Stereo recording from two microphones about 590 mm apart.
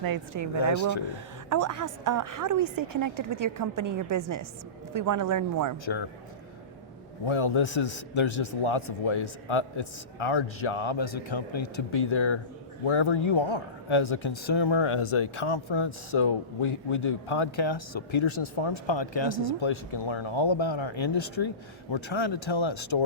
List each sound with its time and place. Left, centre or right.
0.0 s a woman's voice: right
0.6 s speech: left
1.5 s a woman's voice: right
5.8 s speech: left
7.3 s speech: left